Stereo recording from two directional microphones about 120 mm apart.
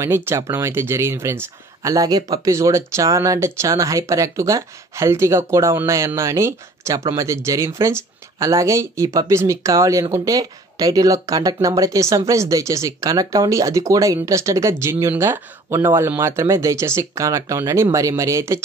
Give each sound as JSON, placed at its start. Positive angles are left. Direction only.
{"t": 0.0, "sound": "speech", "side_deg": -20}